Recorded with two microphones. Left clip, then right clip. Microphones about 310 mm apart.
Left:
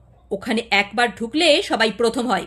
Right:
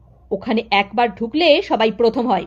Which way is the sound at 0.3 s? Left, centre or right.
Centre.